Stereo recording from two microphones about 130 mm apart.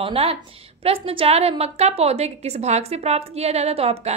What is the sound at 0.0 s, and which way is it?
A woman's voice, 45° right (ahead or behind).